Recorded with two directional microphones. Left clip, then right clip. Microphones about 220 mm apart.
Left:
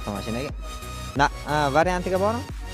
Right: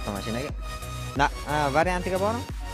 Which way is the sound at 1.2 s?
20° left (ahead or behind).